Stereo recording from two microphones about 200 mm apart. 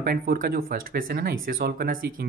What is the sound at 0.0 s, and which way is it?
Speech, 45° right (ahead or behind).